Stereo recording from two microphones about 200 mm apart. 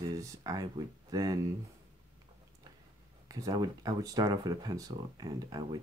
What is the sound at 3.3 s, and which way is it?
Speech, 20° right (ahead or behind).